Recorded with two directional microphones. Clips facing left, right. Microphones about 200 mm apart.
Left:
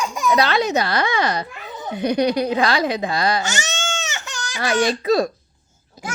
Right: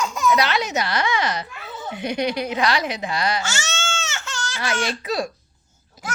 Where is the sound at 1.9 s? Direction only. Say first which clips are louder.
Left 5 dB; 35° left (ahead or behind).